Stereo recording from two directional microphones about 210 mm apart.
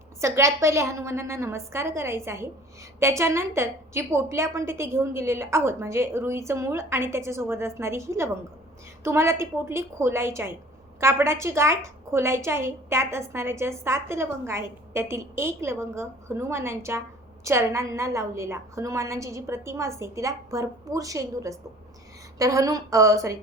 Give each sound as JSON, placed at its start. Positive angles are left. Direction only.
{"t": 0.2, "sound": "a woman's voice", "side_deg": -15}